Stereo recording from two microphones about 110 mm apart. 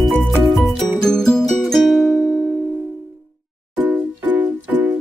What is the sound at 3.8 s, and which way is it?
Music, 15° right (ahead or behind).